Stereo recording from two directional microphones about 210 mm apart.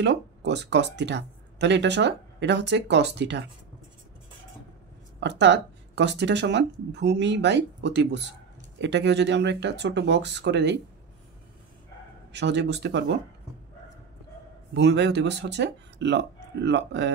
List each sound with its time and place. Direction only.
0.0 s speech: 55° right (ahead or behind)
5.2 s speech: 55° right (ahead or behind)
12.3 s speech: 55° right (ahead or behind)
14.7 s speech: 55° right (ahead or behind)